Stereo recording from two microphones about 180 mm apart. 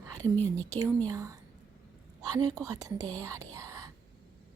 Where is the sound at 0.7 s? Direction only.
20° right (ahead or behind).